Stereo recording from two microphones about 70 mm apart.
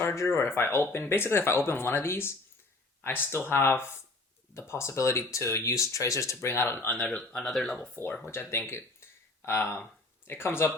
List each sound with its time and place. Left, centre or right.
0.0 s speech: left
7.2 s speech: centre
7.9 s speech: left
8.2 s speech: left
9.5 s speech: left